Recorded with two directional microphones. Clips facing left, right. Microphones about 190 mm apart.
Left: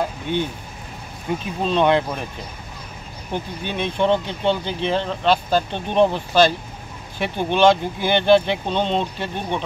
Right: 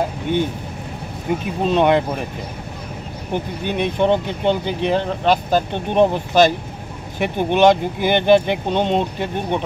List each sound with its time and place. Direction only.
1.6 s speech: 15° right (ahead or behind)
3.3 s speech: 15° right (ahead or behind)